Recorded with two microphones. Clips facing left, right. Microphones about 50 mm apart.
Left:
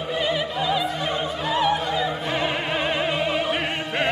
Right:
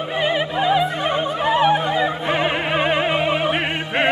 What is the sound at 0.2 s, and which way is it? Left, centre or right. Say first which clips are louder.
Opera: right 6 dB; right.